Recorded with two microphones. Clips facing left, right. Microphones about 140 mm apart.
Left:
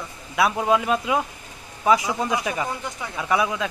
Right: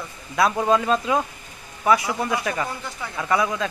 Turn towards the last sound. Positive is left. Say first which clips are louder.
# even
turn(degrees=10)  # may be behind; listen again after turning